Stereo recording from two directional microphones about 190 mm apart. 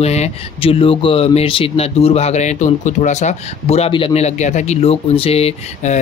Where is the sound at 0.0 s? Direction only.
35° left (ahead or behind).